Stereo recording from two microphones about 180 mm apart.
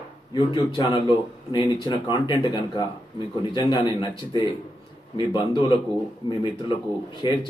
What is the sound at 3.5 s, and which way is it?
Speech, 25° left (ahead or behind).